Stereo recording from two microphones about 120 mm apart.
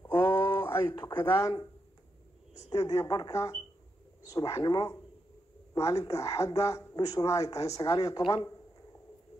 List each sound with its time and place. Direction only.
0.4 s a sound: 35° left (ahead or behind)
0.7 s speech: 30° left (ahead or behind)
2.7 s speech: 30° left (ahead or behind)